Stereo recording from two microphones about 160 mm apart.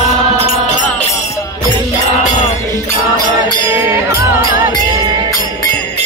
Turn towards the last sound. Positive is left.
turn(degrees=-15)  # may be behind; listen again after turning